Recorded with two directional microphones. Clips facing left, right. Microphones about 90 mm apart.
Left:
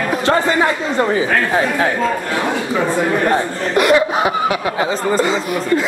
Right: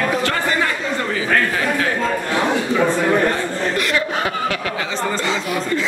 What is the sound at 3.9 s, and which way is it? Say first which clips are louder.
Snicker: left 7 dB; 15° left (ahead or behind).